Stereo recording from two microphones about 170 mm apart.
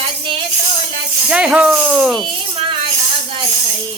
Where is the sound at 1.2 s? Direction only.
5° right (ahead or behind).